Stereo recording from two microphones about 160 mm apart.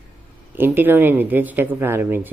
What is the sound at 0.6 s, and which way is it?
Speech, 15° right (ahead or behind).